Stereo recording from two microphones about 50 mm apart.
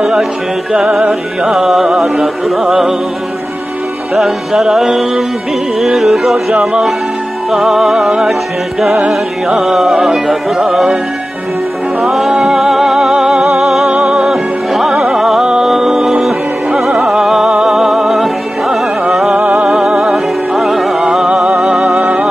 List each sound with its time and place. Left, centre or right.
0.0 s music: centre
4.2 s music: centre
7.5 s music: centre
12.0 s music: centre
21.7 s music: right